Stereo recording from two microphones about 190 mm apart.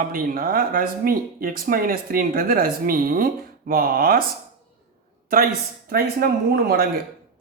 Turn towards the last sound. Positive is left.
turn(degrees=-55)  # may be behind; listen again after turning